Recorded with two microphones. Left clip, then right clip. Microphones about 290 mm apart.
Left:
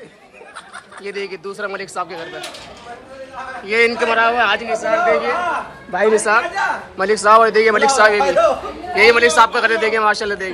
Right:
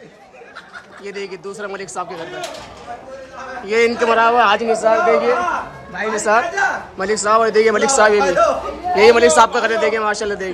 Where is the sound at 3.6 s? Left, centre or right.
Centre.